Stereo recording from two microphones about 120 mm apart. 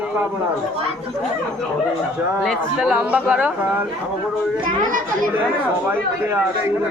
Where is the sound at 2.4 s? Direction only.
5° right (ahead or behind).